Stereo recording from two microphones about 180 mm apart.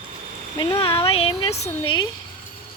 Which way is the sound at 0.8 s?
30° left (ahead or behind).